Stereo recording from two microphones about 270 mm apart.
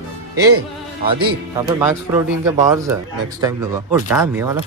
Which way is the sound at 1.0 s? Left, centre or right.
Centre.